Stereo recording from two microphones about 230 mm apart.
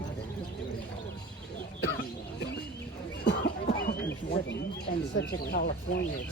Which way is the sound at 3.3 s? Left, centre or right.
Left.